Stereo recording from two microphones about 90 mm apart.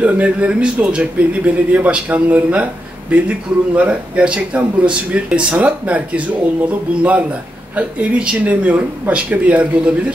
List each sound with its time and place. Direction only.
0.0 s speech: 15° right (ahead or behind)